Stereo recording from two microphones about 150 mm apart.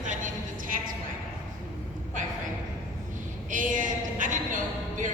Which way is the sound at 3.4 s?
60° right (ahead or behind).